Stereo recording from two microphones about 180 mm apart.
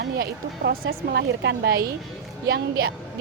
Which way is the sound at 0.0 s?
60° right (ahead or behind).